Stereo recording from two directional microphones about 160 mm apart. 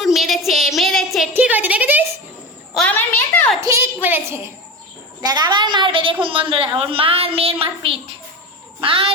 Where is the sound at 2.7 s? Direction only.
10° left (ahead or behind).